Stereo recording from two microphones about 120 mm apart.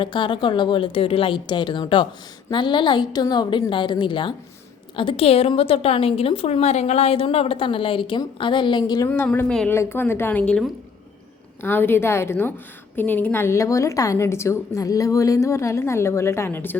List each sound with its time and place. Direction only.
0.0 s a woman's voice: 40° left (ahead or behind)
9.0 s a woman's voice: 15° left (ahead or behind)